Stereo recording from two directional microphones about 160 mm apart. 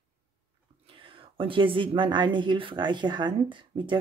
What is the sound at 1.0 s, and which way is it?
Speech, 35° right (ahead or behind).